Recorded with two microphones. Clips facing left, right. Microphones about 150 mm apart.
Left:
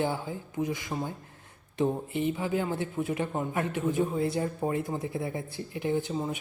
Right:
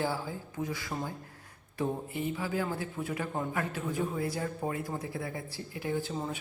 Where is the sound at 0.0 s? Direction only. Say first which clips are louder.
Left 3 dB; 20° left (ahead or behind).